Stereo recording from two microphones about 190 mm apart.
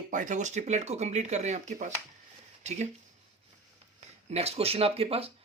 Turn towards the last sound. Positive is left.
turn(degrees=-30)  # may be behind; listen again after turning